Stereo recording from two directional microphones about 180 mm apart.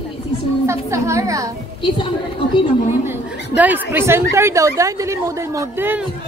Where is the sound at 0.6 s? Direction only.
15° right (ahead or behind).